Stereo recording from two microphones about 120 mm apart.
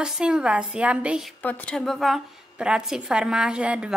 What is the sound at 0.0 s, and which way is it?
A woman's voice, 5° right (ahead or behind).